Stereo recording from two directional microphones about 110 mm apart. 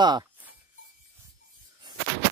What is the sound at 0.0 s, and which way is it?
Speech, 40° right (ahead or behind).